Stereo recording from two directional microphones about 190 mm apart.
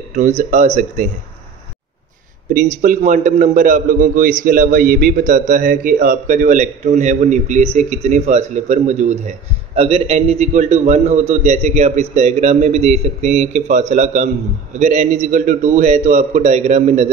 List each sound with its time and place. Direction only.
0.1 s a man's voice: 35° right (ahead or behind)
2.5 s a man's voice: 45° right (ahead or behind)